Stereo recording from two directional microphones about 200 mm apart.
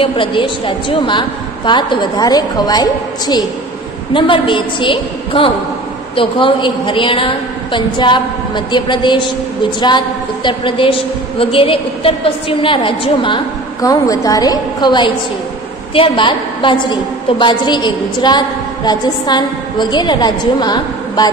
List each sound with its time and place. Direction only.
0.0 s a woman's voice: 25° left (ahead or behind)